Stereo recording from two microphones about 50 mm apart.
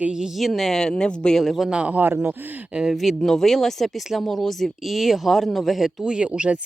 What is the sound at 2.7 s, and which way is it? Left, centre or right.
Speech, centre.